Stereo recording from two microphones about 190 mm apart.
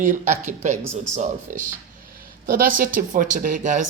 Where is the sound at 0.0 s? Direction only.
40° right (ahead or behind).